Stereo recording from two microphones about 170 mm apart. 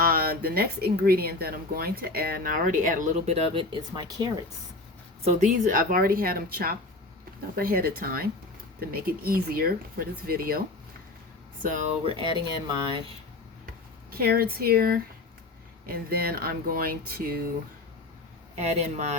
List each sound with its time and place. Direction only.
0.0 s speech: 60° right (ahead or behind); by 4.3 s 30° right (ahead or behind)
5.2 s speech: 45° right (ahead or behind); by 10.6 s 60° right (ahead or behind)
11.6 s speech: 50° right (ahead or behind)
12.0 s speech: 30° right (ahead or behind)
14.1 s speech: 65° right (ahead or behind)
18.5 s speech: 40° right (ahead or behind)